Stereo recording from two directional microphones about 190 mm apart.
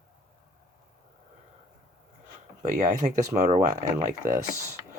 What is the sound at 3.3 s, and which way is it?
Speech, 35° right (ahead or behind).